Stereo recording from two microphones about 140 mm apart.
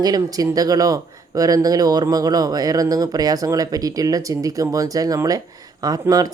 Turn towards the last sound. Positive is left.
turn(degrees=-25)  # may be behind; listen again after turning